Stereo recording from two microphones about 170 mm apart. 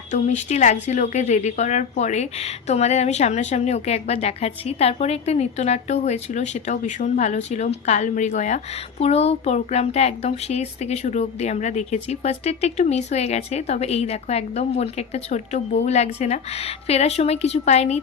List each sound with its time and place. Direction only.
0.1 s a woman's voice: 45° left (ahead or behind)